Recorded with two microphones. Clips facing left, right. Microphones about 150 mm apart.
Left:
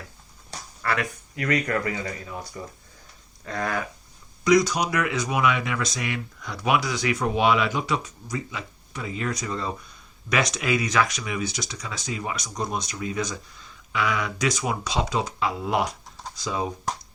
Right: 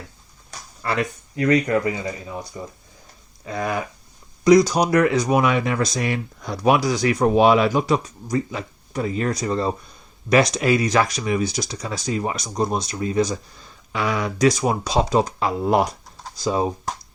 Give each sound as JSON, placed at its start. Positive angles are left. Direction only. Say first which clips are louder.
{"t": 0.8, "sound": "speech", "louder": "right 3 dB", "side_deg": -25}
{"t": 4.4, "sound": "speech", "louder": "right 6 dB", "side_deg": -35}